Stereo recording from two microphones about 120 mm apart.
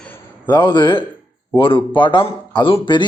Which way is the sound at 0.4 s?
40° left (ahead or behind).